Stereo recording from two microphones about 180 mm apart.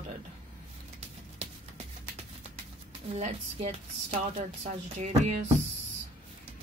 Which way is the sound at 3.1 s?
35° right (ahead or behind).